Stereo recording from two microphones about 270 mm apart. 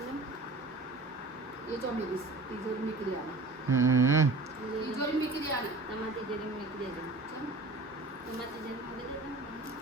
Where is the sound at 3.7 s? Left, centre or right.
Centre.